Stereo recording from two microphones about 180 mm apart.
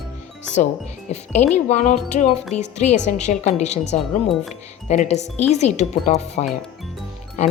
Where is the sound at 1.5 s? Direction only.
40° left (ahead or behind).